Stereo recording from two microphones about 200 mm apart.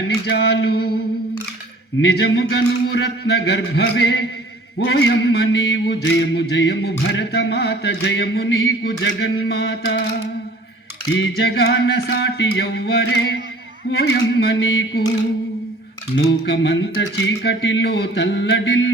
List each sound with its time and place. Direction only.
0.3 s mantra: 55° left (ahead or behind)
2.0 s mantra: 55° left (ahead or behind)
11.1 s mantra: 55° left (ahead or behind)
16.1 s mantra: 60° left (ahead or behind)